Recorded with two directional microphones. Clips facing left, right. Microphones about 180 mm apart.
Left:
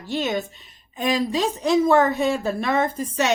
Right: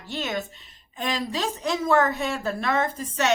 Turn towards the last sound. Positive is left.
turn(degrees=15)  # may be behind; listen again after turning